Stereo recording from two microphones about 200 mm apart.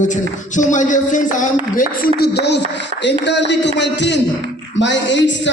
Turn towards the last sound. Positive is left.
turn(degrees=65)  # may be behind; listen again after turning